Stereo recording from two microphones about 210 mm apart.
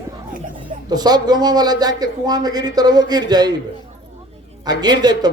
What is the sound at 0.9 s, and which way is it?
A man's voice, 20° right (ahead or behind).